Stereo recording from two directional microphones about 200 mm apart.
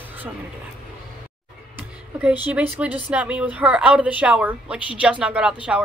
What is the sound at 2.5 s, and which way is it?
Speech, 5° right (ahead or behind).